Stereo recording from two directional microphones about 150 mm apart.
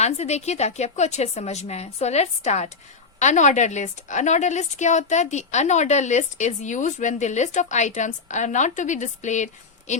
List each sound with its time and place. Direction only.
0.0 s a woman's voice: 45° left (ahead or behind)